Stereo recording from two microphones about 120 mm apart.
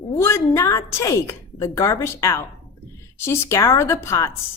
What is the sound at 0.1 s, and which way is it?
A woman's voice, 20° left (ahead or behind).